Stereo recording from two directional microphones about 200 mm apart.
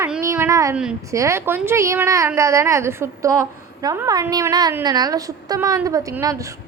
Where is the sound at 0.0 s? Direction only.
15° right (ahead or behind).